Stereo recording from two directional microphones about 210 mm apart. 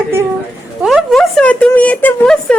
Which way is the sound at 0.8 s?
Centre (ahead or behind).